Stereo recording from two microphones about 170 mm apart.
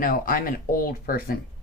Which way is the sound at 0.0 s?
55° left (ahead or behind).